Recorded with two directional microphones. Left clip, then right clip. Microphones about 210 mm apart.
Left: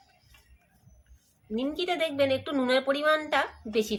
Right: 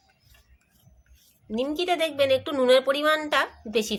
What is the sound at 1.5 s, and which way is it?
A woman's voice, 30° right (ahead or behind).